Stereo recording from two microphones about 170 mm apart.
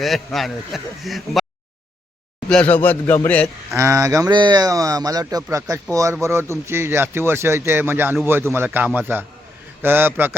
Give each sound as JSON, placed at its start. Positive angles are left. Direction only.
{"t": 0.0, "sound": "a man's voice", "side_deg": 0}
{"t": 2.5, "sound": "speech", "side_deg": 10}
{"t": 3.8, "sound": "speech", "side_deg": -15}